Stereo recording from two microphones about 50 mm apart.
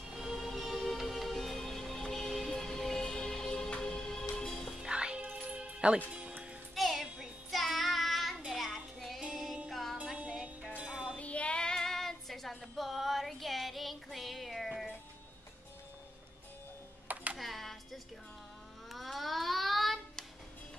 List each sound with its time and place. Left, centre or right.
0.1 s music: centre
4.8 s music: centre
6.8 s music: centre
7.5 s child singing: centre
9.3 s music: centre
10.1 s music: right
11.1 s child singing: left; by 14.9 s centre
17.1 s computer keyboard: right
17.4 s a sound: centre
18.9 s child singing: centre